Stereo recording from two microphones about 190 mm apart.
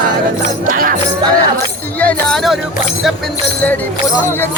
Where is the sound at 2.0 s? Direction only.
5° left (ahead or behind).